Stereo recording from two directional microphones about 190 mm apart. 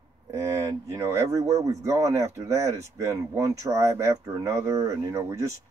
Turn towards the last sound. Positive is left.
turn(degrees=-15)  # may be behind; listen again after turning